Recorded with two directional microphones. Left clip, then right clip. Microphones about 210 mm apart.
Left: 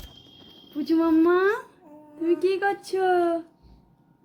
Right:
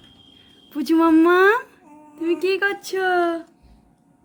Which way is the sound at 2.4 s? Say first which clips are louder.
Right 3 dB; 45° right (ahead or behind).